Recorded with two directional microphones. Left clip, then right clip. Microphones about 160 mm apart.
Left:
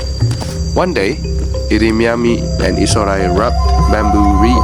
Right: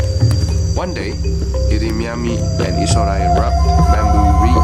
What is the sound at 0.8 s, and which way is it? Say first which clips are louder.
Speech: left 10 dB; 55° left (ahead or behind).